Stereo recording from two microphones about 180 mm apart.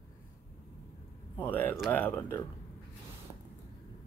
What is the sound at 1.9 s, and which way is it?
Speech, 10° left (ahead or behind).